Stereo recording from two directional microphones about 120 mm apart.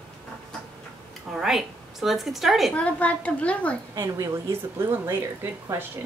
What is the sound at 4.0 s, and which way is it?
Speech, 20° right (ahead or behind).